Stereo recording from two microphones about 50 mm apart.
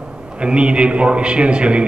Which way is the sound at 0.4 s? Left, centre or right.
Right.